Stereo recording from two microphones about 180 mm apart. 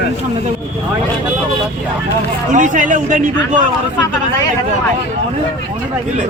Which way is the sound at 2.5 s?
45° right (ahead or behind).